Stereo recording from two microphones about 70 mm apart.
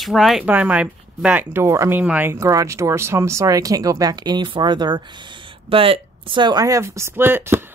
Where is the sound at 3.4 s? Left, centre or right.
Right.